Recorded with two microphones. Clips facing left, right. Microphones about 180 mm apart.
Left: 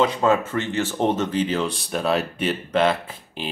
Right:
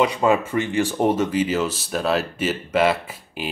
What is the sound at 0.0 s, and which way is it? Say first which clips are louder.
Speech: right 1 dB; 10° right (ahead or behind).